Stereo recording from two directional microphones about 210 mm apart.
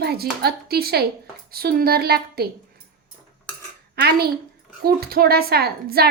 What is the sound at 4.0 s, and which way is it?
A woman's voice, 50° right (ahead or behind).